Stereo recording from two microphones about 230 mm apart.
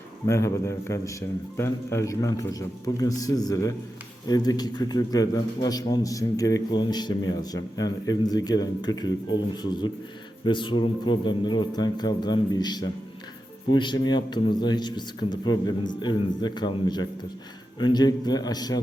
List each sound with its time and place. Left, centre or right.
0.3 s a man's voice: centre